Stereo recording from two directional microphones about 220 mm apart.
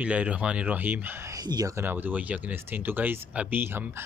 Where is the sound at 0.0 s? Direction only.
5° right (ahead or behind).